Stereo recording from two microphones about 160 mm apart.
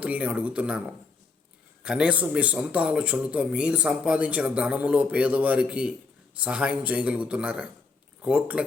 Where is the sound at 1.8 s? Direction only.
5° right (ahead or behind).